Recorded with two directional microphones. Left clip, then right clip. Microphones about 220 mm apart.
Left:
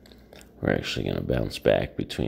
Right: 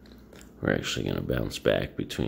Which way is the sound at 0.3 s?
15° left (ahead or behind).